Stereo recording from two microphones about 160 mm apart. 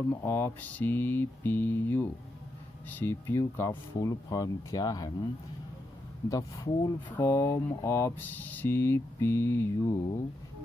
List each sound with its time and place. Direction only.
0.1 s speech: 15° left (ahead or behind)
6.2 s speech: 25° left (ahead or behind)